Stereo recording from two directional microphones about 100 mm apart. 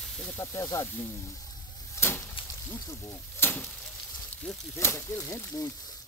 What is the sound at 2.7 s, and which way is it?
Speech, 25° left (ahead or behind).